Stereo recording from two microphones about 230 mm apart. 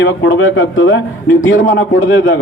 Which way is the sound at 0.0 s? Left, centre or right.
Left.